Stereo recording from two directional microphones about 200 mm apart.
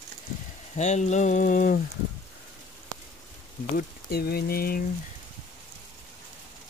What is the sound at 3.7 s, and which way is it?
Speech, 50° left (ahead or behind).